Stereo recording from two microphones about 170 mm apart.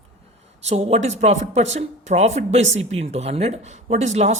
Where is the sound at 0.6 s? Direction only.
40° right (ahead or behind).